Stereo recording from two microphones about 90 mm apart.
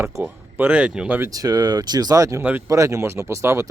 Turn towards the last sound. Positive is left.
turn(degrees=-30)  # may be behind; listen again after turning